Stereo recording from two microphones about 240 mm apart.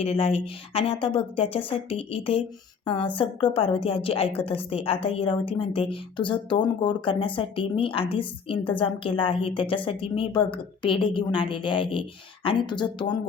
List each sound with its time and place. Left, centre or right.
0.0 s a woman's voice: left